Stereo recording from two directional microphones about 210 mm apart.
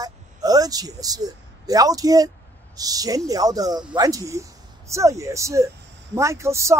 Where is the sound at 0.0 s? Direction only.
15° right (ahead or behind).